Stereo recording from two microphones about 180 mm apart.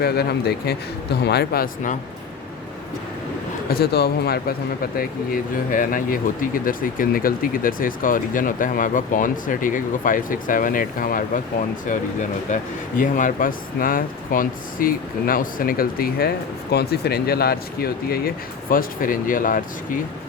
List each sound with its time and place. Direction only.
0.0 s speech: 60° left (ahead or behind)
3.7 s speech: 60° left (ahead or behind)
4.9 s speech: 50° left (ahead or behind)
13.0 s speech: 45° left (ahead or behind)